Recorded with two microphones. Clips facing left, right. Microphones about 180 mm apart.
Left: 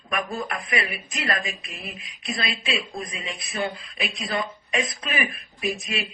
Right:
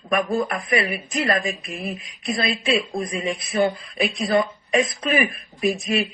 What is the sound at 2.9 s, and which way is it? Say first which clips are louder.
A woman's voice: right 8 dB; 40° right (ahead or behind).